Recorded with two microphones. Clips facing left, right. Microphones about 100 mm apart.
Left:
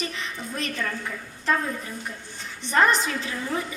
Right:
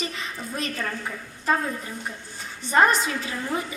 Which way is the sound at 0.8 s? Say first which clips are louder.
Even; 25° right (ahead or behind).